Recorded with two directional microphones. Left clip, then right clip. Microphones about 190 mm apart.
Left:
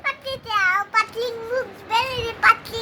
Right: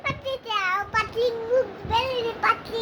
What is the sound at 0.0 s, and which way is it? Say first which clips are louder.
Child singing: left 2 dB; 5° right (ahead or behind).